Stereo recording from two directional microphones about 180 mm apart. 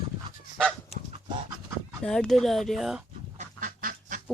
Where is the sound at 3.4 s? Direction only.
50° right (ahead or behind).